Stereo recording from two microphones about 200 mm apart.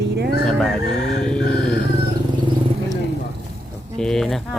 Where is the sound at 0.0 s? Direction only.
55° right (ahead or behind).